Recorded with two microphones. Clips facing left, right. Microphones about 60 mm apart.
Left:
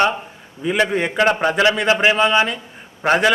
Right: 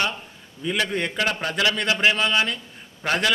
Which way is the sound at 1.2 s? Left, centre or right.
Left.